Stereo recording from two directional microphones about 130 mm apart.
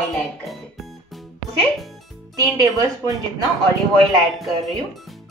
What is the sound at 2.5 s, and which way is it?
Speech, 30° right (ahead or behind).